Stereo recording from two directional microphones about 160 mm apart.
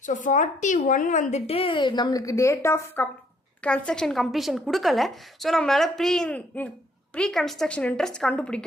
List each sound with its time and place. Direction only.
0.0 s a woman's voice: 50° left (ahead or behind); by 8.6 s 5° left (ahead or behind)